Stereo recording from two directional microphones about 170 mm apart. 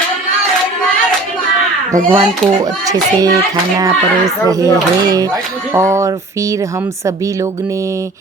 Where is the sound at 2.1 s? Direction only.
20° right (ahead or behind).